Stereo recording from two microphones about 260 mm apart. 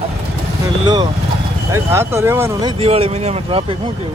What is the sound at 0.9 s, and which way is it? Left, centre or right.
Speech, centre.